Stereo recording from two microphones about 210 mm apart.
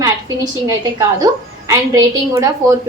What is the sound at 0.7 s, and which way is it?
A woman's voice, 15° right (ahead or behind).